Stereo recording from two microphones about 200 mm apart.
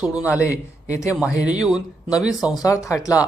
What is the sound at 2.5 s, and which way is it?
Speech, 15° left (ahead or behind).